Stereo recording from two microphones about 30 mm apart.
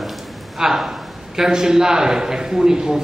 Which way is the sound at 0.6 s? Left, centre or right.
Centre.